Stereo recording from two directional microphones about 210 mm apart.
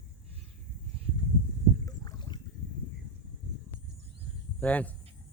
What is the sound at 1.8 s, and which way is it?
Boat, 15° left (ahead or behind).